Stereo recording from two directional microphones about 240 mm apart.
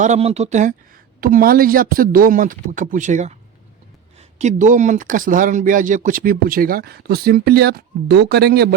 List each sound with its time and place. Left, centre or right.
0.0 s speech: right